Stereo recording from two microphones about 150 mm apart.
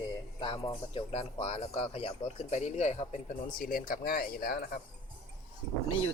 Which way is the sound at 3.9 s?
80° left.